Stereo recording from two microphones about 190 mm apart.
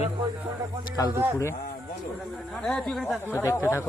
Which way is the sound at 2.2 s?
Centre (ahead or behind).